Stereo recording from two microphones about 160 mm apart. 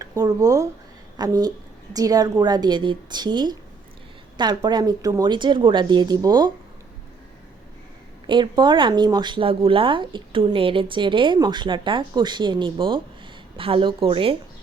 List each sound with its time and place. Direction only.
0.0 s a woman's voice: 25° right (ahead or behind)
8.3 s speech: 30° right (ahead or behind)